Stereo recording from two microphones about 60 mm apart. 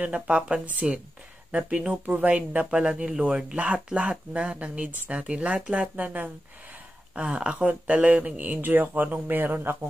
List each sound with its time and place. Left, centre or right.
0.0 s speech: centre
7.2 s speech: centre
8.5 s speech: right